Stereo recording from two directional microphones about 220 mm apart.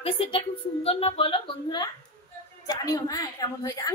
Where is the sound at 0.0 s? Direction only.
25° left (ahead or behind).